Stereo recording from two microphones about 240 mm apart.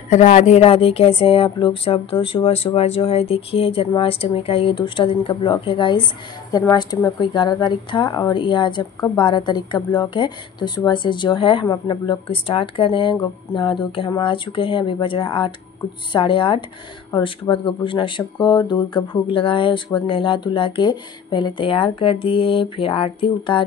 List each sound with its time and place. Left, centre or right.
0.1 s a woman's voice: left